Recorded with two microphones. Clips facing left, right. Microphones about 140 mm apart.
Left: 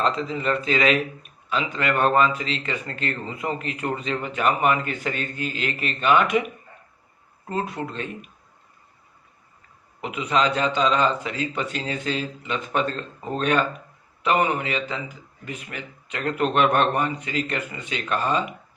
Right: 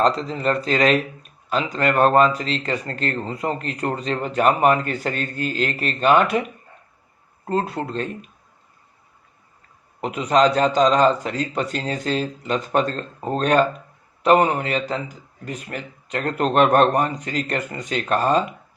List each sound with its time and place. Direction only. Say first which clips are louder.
0.0 s speech: right 4 dB; 40° right (ahead or behind)
7.4 s speech: right 4 dB; 35° right (ahead or behind)
10.0 s speech: right 5 dB; 40° right (ahead or behind)